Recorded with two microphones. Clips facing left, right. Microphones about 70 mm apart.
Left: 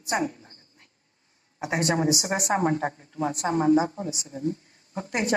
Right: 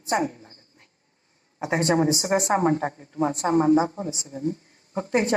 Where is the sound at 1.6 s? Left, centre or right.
Right.